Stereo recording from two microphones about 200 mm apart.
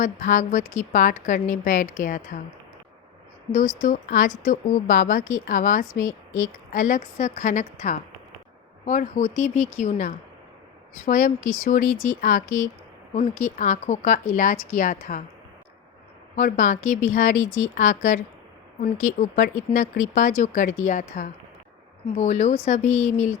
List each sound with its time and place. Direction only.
0.0 s a woman's voice: 40° left (ahead or behind)
3.8 s a woman's voice: 40° left (ahead or behind)
16.3 s a woman's voice: 40° left (ahead or behind)